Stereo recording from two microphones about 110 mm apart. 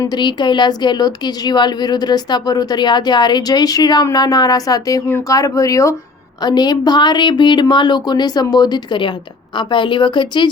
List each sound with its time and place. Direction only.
0.0 s speech: 40° left (ahead or behind)
6.4 s speech: 40° left (ahead or behind)